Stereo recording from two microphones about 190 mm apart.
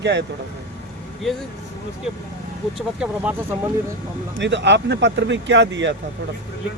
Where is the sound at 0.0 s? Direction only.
65° right (ahead or behind).